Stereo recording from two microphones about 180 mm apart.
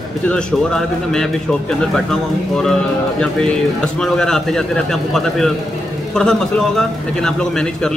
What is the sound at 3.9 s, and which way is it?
A man's voice, 5° left (ahead or behind).